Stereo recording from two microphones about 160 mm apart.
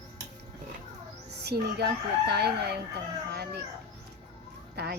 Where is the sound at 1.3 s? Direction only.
90° right.